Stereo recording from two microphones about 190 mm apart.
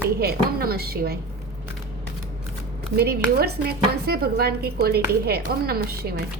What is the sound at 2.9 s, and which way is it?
Speech, 55° right (ahead or behind).